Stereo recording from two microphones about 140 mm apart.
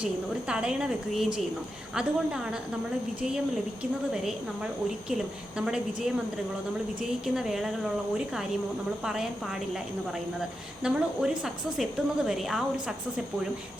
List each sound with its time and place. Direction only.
0.0 s a woman's voice: 5° right (ahead or behind)
9.0 s a woman's voice: 5° right (ahead or behind)
10.8 s a woman's voice: 5° right (ahead or behind)